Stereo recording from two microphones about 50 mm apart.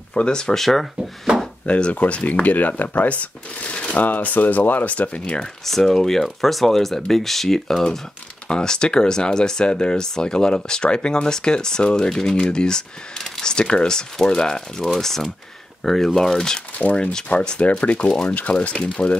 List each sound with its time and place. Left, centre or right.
0.1 s speech: centre
0.6 s speech: centre
1.7 s speech: left
5.7 s speech: centre
16.7 s speech: left